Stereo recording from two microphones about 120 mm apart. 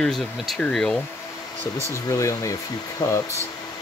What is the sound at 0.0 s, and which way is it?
Speech, 5° left (ahead or behind).